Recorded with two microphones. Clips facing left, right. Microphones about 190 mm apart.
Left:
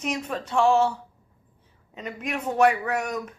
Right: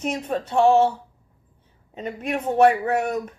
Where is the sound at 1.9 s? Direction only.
35° right (ahead or behind).